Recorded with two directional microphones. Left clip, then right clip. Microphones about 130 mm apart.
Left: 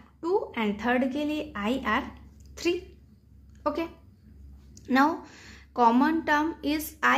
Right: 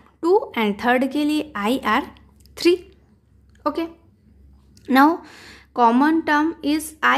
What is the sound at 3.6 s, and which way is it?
Speech, 25° right (ahead or behind).